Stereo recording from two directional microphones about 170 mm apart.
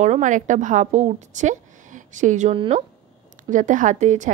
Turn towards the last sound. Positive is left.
turn(degrees=-45)  # may be behind; listen again after turning